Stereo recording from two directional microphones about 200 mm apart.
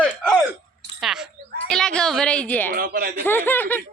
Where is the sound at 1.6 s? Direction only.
5° left (ahead or behind).